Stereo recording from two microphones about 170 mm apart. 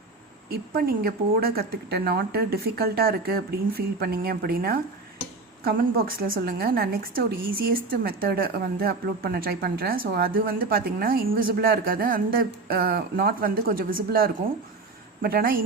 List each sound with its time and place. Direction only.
0.5 s a woman's voice: 60° right (ahead or behind)